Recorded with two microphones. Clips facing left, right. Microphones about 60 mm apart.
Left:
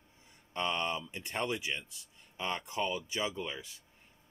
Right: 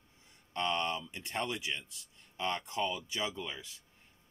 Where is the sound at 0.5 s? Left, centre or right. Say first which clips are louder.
Even; left.